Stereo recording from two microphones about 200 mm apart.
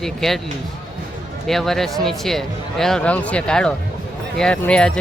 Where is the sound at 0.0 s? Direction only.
Centre (ahead or behind).